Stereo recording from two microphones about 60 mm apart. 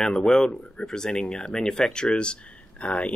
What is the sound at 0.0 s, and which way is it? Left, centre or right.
Speech, centre.